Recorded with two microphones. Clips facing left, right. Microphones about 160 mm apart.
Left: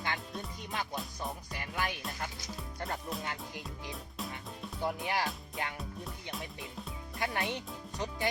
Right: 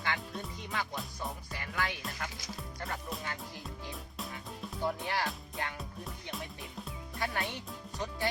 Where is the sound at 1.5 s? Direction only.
20° left (ahead or behind).